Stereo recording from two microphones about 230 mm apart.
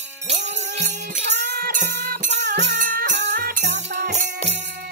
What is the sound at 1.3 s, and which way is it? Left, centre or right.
Music, right.